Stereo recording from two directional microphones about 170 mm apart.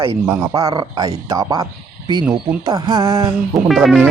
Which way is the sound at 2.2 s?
5° right (ahead or behind).